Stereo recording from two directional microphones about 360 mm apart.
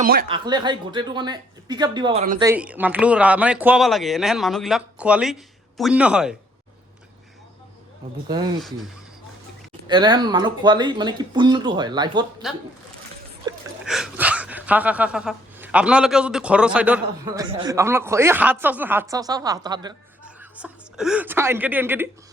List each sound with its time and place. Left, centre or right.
0.0 s speech: right
0.3 s speech: centre
9.9 s speech: centre
12.4 s speech: centre